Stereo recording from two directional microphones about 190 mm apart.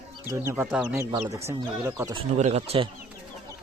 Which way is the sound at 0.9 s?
15° right (ahead or behind).